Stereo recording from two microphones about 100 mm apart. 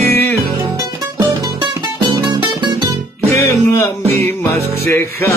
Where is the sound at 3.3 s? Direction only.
25° left (ahead or behind).